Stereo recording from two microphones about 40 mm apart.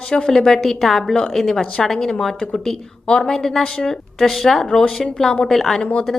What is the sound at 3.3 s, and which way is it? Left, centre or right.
Speech, centre.